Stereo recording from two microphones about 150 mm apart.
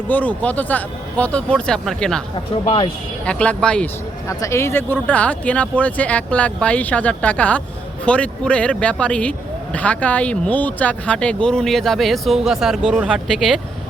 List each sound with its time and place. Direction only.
0.1 s speech: 10° left (ahead or behind)
2.6 s speech: 35° left (ahead or behind)
3.2 s speech: 5° left (ahead or behind)
4.3 s speech: 20° left (ahead or behind); by 13.6 s 5° right (ahead or behind)